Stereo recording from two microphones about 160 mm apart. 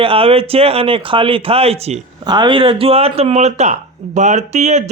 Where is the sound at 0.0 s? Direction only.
35° right (ahead or behind).